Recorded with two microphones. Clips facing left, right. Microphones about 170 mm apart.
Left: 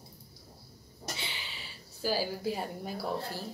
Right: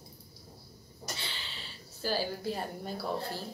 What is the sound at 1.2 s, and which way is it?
A woman's voice, 15° left (ahead or behind).